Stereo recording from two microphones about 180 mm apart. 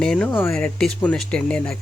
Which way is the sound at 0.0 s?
5° left (ahead or behind).